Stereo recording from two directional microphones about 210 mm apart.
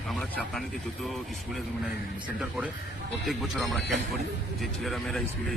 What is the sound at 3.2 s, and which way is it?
Speech, centre (ahead or behind).